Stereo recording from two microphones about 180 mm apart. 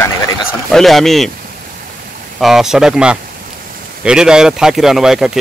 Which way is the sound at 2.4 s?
Centre (ahead or behind).